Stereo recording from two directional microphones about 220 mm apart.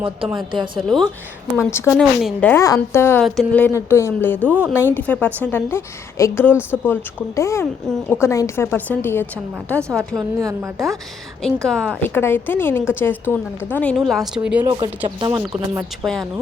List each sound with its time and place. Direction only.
0.8 s a woman's voice: centre (ahead or behind)
1.7 s a woman's voice: 10° left (ahead or behind)
6.5 s speech: 5° right (ahead or behind)
6.8 s a woman's voice: 10° left (ahead or behind)
11.4 s a woman's voice: 5° left (ahead or behind)
14.7 s speech: 20° right (ahead or behind)